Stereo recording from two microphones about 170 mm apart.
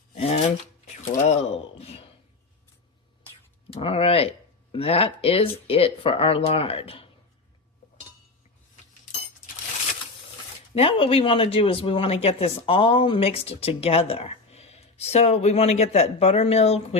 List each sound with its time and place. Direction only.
0.1 s a sound: 40° left (ahead or behind)
1.3 s speech: 40° left (ahead or behind)
3.8 s speech: 35° left (ahead or behind)
10.8 s speech: 30° left (ahead or behind)